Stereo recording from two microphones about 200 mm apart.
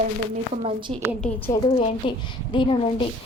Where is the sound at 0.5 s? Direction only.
30° right (ahead or behind).